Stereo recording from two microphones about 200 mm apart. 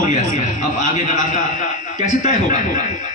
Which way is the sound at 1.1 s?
40° left (ahead or behind).